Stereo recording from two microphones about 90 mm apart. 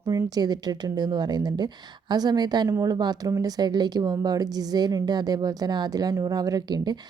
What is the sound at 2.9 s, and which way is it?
A woman's voice, 45° right (ahead or behind).